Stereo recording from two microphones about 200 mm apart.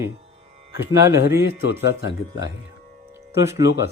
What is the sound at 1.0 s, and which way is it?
Music, 15° right (ahead or behind).